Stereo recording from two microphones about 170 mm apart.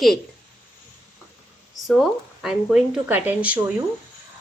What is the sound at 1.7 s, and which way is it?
Speech, centre (ahead or behind).